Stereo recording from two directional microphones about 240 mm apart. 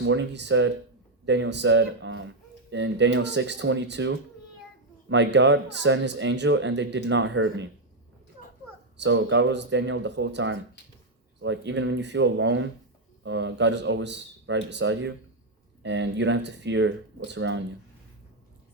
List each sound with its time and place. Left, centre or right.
0.0 s speech: right
8.4 s a sound: left
9.0 s speech: right